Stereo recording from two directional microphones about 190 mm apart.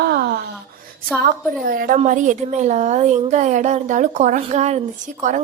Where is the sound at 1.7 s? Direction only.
50° right (ahead or behind).